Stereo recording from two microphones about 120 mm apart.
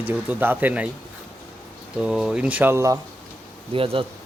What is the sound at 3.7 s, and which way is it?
Speech, 50° right (ahead or behind).